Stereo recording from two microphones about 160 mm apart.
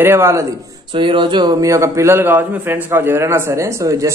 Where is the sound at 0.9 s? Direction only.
30° right (ahead or behind).